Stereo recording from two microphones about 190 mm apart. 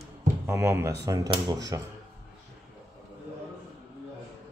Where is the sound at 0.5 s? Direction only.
15° right (ahead or behind).